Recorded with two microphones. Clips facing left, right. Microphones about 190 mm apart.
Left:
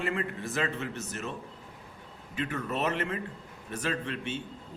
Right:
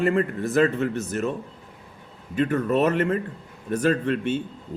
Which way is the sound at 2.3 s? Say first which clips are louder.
Right 11 dB; 50° right (ahead or behind).